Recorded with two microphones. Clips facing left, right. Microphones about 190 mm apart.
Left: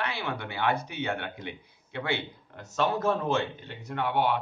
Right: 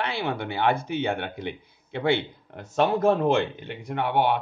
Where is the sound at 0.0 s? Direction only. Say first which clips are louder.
Right 5 dB; 55° right (ahead or behind).